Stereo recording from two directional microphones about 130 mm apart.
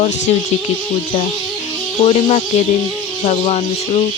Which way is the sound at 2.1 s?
55° left (ahead or behind).